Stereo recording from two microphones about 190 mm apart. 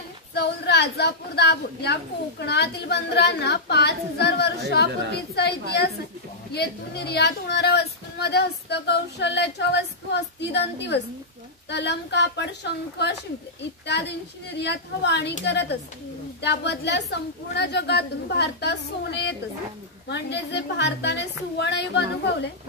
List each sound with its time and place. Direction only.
0.3 s a woman's voice: 60° left (ahead or behind)
14.6 s a woman's voice: 60° left (ahead or behind)